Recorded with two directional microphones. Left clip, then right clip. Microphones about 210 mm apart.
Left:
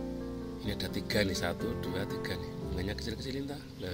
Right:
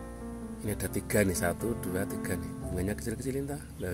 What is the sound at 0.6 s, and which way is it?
Speech, 45° right (ahead or behind).